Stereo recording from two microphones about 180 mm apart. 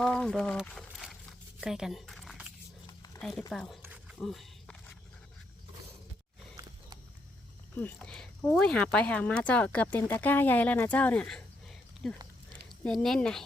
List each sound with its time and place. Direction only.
0.0 s speech: 5° left (ahead or behind)
2.8 s a sound: 20° left (ahead or behind)
3.2 s speech: centre (ahead or behind)
4.2 s wild animals: centre (ahead or behind)
7.8 s speech: 5° left (ahead or behind)